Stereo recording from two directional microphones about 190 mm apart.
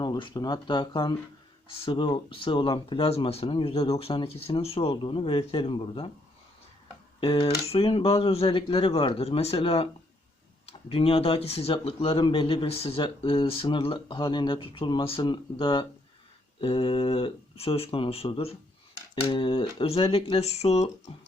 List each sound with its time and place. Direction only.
0.0 s speech: 25° left (ahead or behind)
7.2 s speech: 30° left (ahead or behind)